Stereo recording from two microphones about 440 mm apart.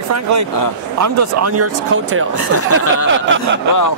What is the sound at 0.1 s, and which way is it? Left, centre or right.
Speech, right.